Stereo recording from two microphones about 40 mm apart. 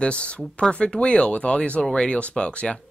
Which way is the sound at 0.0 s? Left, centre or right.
Left.